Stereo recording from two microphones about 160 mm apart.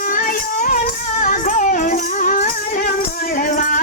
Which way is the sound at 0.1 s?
60° left (ahead or behind).